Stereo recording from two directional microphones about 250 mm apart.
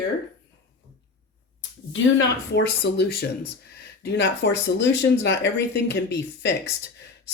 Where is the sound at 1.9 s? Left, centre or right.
Left.